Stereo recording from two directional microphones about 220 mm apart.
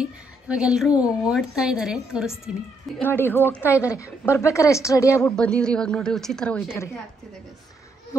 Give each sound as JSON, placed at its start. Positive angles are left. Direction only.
{"t": 0.0, "sound": "a woman's voice", "side_deg": -5}
{"t": 3.0, "sound": "a woman's voice", "side_deg": 10}